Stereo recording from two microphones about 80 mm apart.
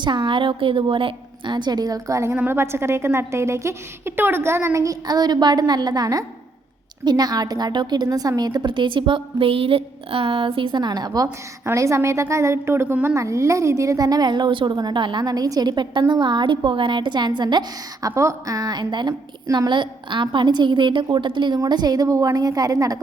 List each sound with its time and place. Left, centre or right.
0.0 s a woman's voice: right
2.3 s a woman's voice: right
8.7 s a woman's voice: right
10.2 s a woman's voice: right
11.6 s a woman's voice: right
15.2 s a woman's voice: right
18.1 s a woman's voice: right
20.2 s a woman's voice: right
21.6 s a woman's voice: right